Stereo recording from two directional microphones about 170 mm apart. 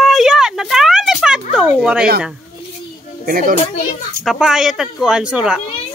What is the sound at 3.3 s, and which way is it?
Speech, 55° right (ahead or behind).